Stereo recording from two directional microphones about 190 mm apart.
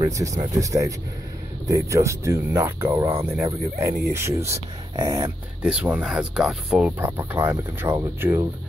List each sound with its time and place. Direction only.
0.0 s speech: 15° right (ahead or behind)
5.6 s speech: 5° right (ahead or behind)